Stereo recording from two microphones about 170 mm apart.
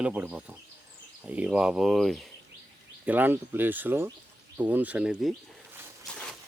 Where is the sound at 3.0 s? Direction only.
10° right (ahead or behind).